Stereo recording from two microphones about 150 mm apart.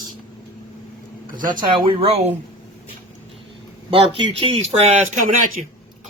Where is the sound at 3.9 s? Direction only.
35° right (ahead or behind).